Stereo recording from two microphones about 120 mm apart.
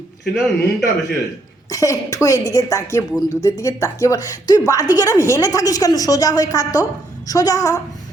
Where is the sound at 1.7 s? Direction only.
25° left (ahead or behind).